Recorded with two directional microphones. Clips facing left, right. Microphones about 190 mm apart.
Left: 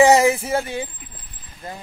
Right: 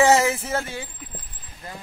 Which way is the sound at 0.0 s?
15° left (ahead or behind).